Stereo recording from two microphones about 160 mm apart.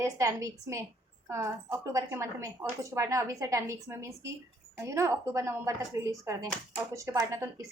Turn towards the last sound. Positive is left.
turn(degrees=-20)  # may be behind; listen again after turning